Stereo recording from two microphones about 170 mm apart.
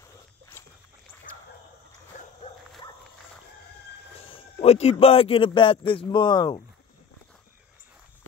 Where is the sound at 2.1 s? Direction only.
45° left (ahead or behind).